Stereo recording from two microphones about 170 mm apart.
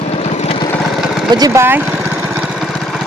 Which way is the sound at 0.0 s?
40° left (ahead or behind).